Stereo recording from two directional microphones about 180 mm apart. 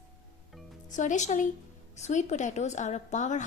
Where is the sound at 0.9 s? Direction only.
45° left (ahead or behind).